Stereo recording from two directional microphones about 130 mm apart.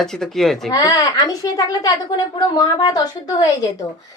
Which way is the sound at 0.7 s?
30° left (ahead or behind).